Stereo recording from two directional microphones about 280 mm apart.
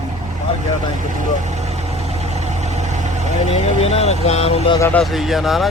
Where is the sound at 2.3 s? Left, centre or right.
Right.